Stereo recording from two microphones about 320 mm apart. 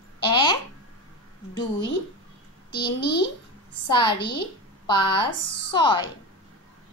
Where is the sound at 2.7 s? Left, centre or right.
Centre.